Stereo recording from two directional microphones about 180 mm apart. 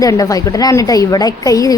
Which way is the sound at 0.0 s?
20° left (ahead or behind).